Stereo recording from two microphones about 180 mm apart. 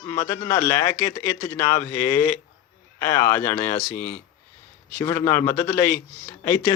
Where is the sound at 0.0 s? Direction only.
15° left (ahead or behind).